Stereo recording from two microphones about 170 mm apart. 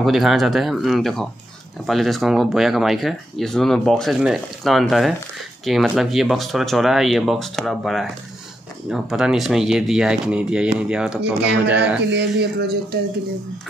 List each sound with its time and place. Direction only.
0.0 s speech: centre (ahead or behind)
12.1 s speech: 80° right